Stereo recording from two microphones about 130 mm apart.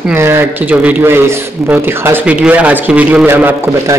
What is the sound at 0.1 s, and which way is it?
A man's voice, 15° right (ahead or behind).